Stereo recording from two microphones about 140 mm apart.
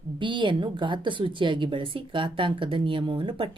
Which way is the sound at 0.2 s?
35° right (ahead or behind).